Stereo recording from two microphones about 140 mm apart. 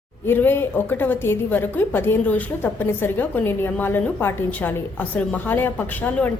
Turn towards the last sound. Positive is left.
turn(degrees=10)  # may be behind; listen again after turning